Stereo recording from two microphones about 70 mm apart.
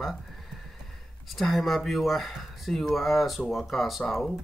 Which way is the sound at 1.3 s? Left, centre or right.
Centre.